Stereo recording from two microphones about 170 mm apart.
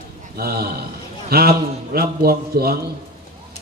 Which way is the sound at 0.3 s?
65° right (ahead or behind).